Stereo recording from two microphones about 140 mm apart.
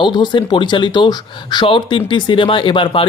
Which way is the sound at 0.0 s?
35° left (ahead or behind).